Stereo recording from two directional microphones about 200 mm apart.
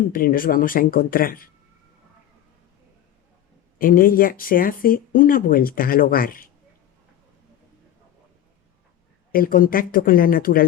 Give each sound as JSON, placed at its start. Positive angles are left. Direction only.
{"t": 0.1, "sound": "speech", "side_deg": 45}
{"t": 3.8, "sound": "speech", "side_deg": 45}
{"t": 9.3, "sound": "speech", "side_deg": 45}